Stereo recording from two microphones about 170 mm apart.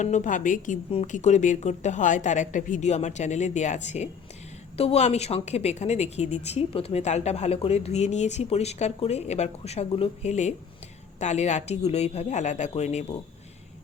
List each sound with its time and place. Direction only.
0.0 s a woman's voice: 45° left (ahead or behind)